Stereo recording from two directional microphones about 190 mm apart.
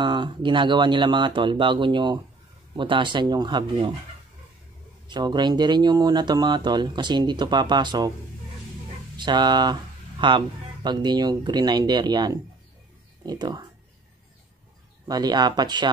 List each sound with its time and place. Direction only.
0.0 s speech: 25° right (ahead or behind)
5.0 s speech: 25° right (ahead or behind)
9.1 s speech: 25° right (ahead or behind)
15.0 s speech: 20° right (ahead or behind)